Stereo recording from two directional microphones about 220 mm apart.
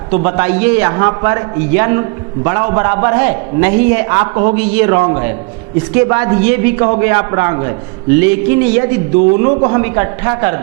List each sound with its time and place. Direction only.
0.1 s a man's voice: 15° right (ahead or behind)
9.5 s speech: 30° right (ahead or behind)
9.7 s a man's voice: 20° right (ahead or behind)